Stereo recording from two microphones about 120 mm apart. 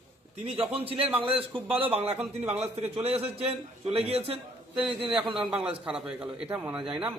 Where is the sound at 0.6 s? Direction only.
50° right (ahead or behind).